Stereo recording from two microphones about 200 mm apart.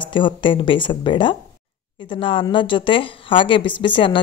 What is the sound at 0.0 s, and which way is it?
A woman's voice, 25° left (ahead or behind).